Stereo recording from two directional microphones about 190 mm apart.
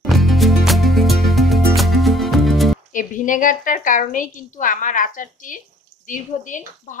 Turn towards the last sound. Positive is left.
turn(degrees=40)  # may be behind; listen again after turning